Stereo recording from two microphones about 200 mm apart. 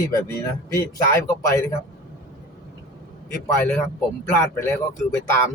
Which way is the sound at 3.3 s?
5° left (ahead or behind).